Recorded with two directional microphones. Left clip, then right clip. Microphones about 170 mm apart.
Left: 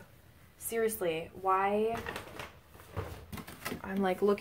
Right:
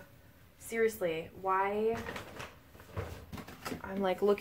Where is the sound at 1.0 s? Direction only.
60° left (ahead or behind).